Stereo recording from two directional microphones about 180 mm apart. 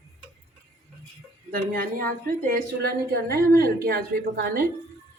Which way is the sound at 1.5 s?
55° right (ahead or behind).